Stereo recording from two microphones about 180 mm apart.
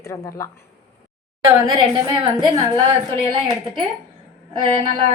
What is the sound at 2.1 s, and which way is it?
Speech, 25° right (ahead or behind).